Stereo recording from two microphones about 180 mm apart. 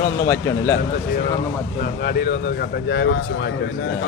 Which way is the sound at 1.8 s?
60° left (ahead or behind).